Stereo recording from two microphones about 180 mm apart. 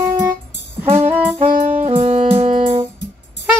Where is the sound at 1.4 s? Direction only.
40° right (ahead or behind).